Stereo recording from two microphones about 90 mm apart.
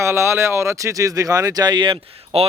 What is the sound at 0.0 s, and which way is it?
Speech, 30° right (ahead or behind).